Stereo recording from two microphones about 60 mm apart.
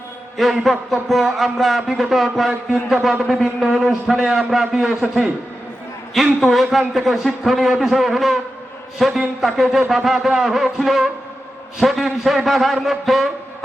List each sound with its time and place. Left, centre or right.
0.3 s a man's voice: centre
6.1 s a man's voice: centre